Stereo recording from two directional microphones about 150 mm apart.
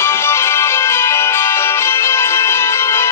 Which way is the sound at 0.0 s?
15° left (ahead or behind).